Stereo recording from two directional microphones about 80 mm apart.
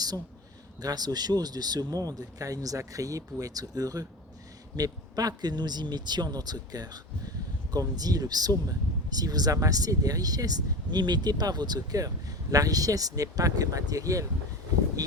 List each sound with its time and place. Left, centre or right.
0.8 s speech: right